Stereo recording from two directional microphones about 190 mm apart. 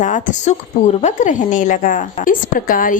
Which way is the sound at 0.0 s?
40° left (ahead or behind).